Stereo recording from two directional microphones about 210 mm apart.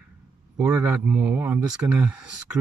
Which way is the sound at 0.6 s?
10° right (ahead or behind).